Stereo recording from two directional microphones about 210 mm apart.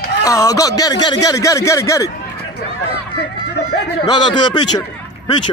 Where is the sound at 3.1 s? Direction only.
55° left (ahead or behind).